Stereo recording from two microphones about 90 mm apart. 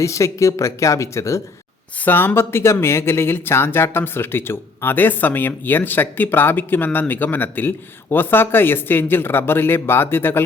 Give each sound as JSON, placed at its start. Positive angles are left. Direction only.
{"t": 0.0, "sound": "speech", "side_deg": 35}